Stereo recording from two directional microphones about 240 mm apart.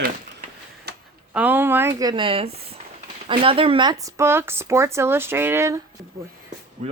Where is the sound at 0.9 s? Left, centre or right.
Right.